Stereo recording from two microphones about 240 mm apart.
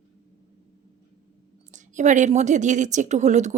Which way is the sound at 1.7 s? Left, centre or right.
Right.